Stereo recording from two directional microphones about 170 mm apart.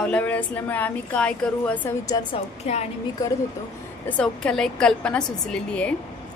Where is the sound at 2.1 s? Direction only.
25° left (ahead or behind).